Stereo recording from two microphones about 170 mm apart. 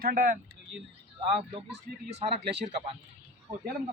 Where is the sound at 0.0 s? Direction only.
55° right (ahead or behind).